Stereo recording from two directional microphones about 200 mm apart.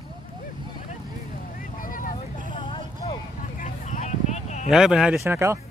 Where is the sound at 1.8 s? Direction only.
40° left (ahead or behind).